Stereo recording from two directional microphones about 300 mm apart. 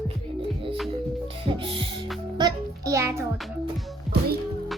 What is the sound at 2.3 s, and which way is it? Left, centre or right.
Speech, centre.